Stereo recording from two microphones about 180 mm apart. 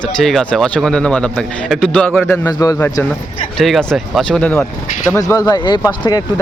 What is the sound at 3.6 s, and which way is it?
Speech, 5° left (ahead or behind).